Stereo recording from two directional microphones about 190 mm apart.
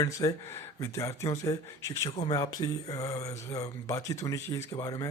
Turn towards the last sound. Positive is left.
turn(degrees=20)  # may be behind; listen again after turning